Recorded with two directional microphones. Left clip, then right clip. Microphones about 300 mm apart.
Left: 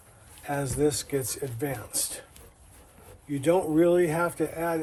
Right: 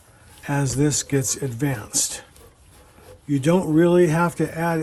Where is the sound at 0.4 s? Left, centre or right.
Right.